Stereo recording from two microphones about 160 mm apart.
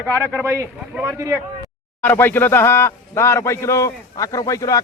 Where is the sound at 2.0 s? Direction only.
10° left (ahead or behind).